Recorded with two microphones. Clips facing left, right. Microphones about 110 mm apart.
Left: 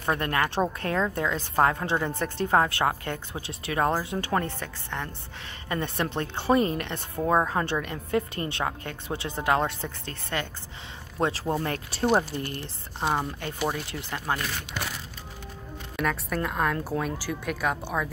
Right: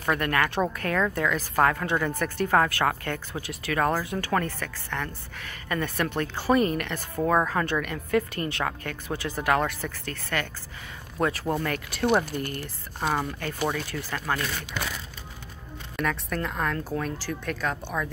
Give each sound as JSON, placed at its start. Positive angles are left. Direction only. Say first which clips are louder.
{"t": 0.0, "sound": "speech", "louder": "right 1 dB", "side_deg": 25}
{"t": 16.0, "sound": "speech", "louder": "left 1 dB", "side_deg": 5}